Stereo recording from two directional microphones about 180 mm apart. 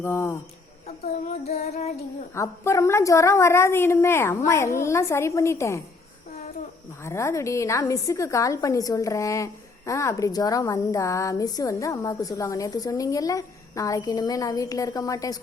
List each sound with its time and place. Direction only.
0.0 s a woman's voice: 15° left (ahead or behind)
2.3 s a woman's voice: 15° left (ahead or behind)
7.0 s a woman's voice: 15° left (ahead or behind)